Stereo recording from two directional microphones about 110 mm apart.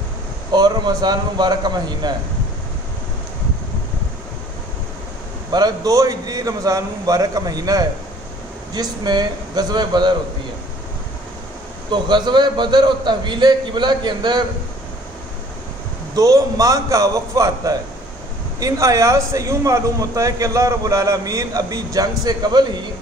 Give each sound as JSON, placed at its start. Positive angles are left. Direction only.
{"t": 0.5, "sound": "a man's voice", "side_deg": -40}
{"t": 5.5, "sound": "a man's voice", "side_deg": -35}
{"t": 11.9, "sound": "a man's voice", "side_deg": -45}
{"t": 16.2, "sound": "a man's voice", "side_deg": -30}